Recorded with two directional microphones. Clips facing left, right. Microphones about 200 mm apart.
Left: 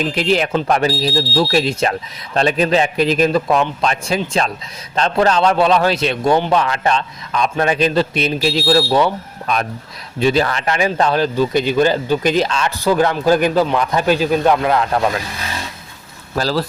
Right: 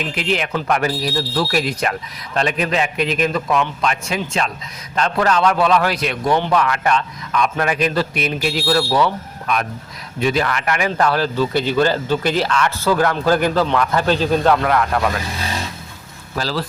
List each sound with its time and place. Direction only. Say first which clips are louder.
0.0 s a man's voice: left 5 dB; 35° left (ahead or behind)
16.4 s speech: left 4 dB; 40° left (ahead or behind)